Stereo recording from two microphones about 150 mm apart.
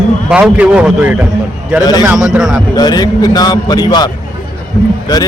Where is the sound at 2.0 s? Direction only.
5° right (ahead or behind).